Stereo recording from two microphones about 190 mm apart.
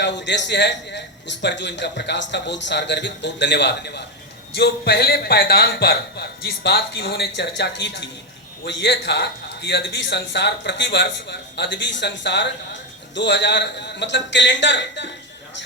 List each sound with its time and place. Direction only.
0.0 s a man's voice: 65° left (ahead or behind)